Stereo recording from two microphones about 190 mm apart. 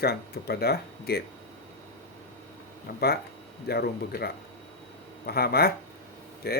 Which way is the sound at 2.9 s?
60° left (ahead or behind).